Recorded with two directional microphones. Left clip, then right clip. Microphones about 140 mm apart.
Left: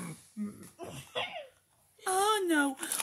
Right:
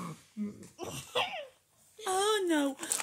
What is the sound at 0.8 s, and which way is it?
Speech, 70° right (ahead or behind).